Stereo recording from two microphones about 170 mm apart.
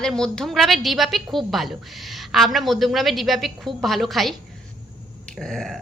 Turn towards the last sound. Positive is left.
turn(degrees=0)  # may be behind; listen again after turning